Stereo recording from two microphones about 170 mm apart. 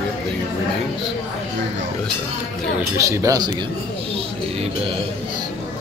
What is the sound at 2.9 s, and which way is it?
Speech, 20° right (ahead or behind).